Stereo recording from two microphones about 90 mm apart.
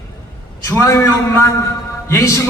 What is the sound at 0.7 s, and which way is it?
A man's voice, 30° left (ahead or behind).